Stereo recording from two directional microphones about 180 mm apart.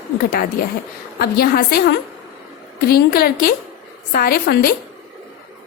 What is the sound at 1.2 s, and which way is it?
A woman's voice, 60° left (ahead or behind).